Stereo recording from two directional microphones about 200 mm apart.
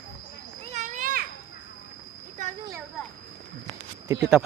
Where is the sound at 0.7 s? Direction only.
35° right (ahead or behind).